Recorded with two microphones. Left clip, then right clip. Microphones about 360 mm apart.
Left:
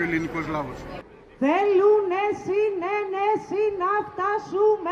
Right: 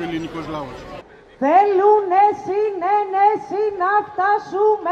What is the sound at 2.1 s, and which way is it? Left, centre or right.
A man's voice, centre.